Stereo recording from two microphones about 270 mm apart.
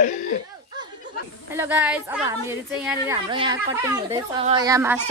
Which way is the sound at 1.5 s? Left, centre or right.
Centre.